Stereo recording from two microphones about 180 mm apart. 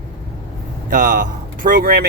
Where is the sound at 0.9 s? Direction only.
45° right (ahead or behind).